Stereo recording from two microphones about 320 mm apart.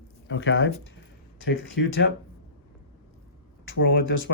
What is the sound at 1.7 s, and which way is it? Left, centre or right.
Speech, left.